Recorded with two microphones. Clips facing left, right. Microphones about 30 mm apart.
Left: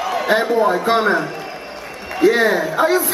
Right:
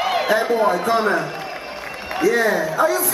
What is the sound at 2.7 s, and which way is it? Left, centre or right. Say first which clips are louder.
Speech: left 2 dB; left.